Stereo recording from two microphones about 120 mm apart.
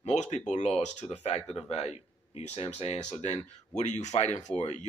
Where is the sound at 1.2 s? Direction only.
60° left (ahead or behind).